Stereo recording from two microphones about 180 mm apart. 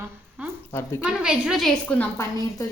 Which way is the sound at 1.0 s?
5° right (ahead or behind).